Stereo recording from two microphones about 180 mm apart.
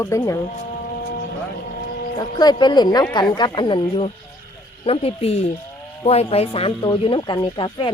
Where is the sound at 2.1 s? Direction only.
25° left (ahead or behind).